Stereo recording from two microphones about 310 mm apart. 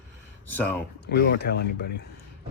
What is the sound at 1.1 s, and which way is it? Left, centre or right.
Speech, left.